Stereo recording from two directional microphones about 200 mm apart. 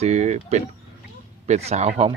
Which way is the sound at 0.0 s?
35° right (ahead or behind).